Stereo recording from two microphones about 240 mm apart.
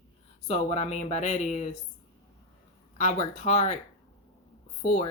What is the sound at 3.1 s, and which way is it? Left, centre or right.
Speech, left.